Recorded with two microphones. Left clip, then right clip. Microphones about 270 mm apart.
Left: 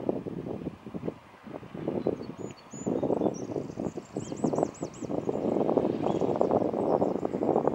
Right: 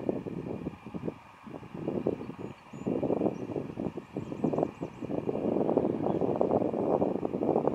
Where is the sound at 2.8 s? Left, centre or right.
Right.